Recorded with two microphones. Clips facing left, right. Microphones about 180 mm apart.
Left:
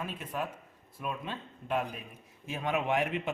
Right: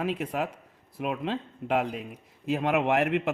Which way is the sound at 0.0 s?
85° right.